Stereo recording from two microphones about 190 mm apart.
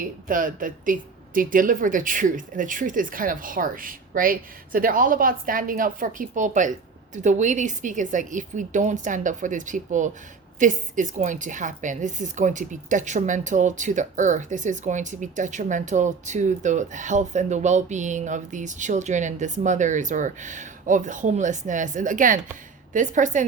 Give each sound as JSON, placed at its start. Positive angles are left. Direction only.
{"t": 0.3, "sound": "a woman's voice", "side_deg": -45}